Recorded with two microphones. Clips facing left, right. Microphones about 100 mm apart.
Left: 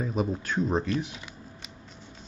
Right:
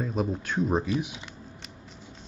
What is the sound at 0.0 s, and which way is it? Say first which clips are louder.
Speech: even; centre (ahead or behind).